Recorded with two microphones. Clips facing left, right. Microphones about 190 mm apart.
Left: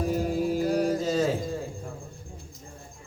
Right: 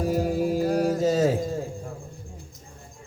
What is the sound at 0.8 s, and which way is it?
Mantra, 45° right (ahead or behind).